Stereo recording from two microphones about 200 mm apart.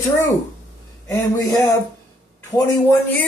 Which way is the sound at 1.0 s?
15° left (ahead or behind).